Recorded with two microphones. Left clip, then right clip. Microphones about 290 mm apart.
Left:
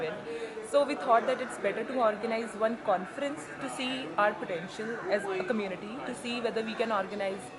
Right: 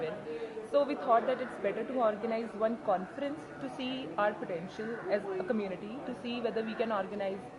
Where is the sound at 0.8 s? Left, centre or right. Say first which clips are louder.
Left 2 dB; centre.